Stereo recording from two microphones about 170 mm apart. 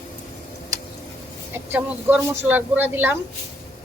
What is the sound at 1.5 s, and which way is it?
Speech, 15° right (ahead or behind).